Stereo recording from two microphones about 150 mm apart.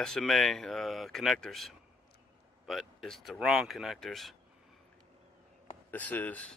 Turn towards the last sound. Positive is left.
turn(degrees=10)  # may be behind; listen again after turning